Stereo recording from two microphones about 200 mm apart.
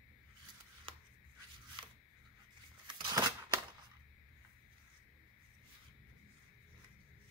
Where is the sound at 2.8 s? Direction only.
20° right (ahead or behind).